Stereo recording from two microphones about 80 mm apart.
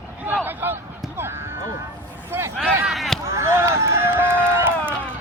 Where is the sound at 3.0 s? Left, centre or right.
Centre.